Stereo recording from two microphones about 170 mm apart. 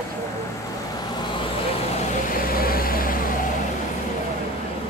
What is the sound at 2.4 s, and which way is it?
Vehicle, 60° left (ahead or behind).